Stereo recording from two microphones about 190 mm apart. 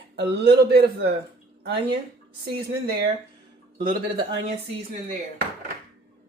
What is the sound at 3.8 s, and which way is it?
Speech, 50° right (ahead or behind).